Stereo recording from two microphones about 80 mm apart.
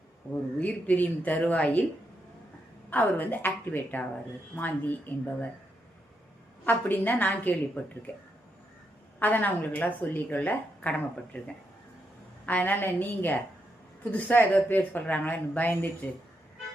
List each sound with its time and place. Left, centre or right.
0.6 s a woman's voice: centre
2.9 s a woman's voice: left
6.7 s a woman's voice: left
9.1 s a woman's voice: left
12.5 s a woman's voice: left